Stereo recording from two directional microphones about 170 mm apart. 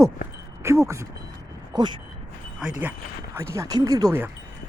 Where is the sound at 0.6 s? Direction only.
15° right (ahead or behind).